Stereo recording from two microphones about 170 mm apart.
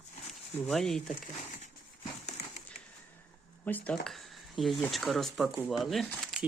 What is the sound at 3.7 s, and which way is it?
Speech, 10° left (ahead or behind).